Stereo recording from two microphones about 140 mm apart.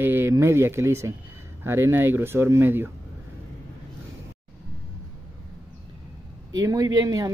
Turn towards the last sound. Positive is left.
turn(degrees=-25)  # may be behind; listen again after turning